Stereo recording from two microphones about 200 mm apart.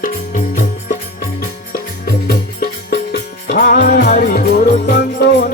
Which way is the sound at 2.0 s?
50° left (ahead or behind).